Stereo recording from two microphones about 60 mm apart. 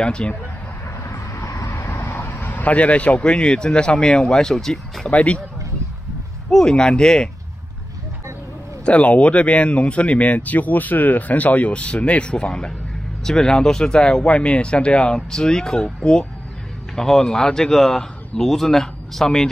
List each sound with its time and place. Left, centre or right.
0.0 s speech: centre
1.0 s vehicle: left
1.9 s a sound: left
2.2 s speech: left; by 5.1 s centre
5.1 s speech: left
6.5 s speech: centre
8.8 s speech: left